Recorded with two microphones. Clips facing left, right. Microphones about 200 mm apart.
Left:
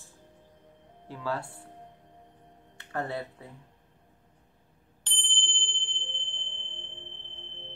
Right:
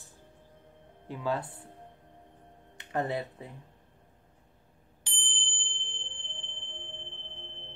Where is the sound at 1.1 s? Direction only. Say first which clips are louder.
Right 2 dB; 20° right (ahead or behind).